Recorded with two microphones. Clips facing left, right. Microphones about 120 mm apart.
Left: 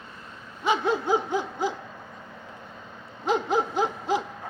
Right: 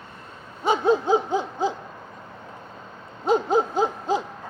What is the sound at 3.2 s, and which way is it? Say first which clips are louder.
Owl: right 4 dB; 35° right (ahead or behind).